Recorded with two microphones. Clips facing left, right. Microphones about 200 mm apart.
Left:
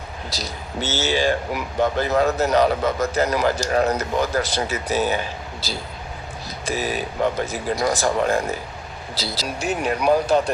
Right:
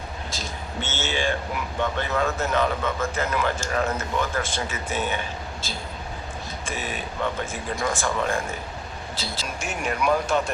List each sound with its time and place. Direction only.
0.3 s a man's voice: 40° left (ahead or behind)